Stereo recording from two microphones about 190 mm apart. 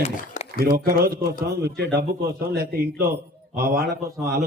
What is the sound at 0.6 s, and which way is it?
Speech, 50° right (ahead or behind).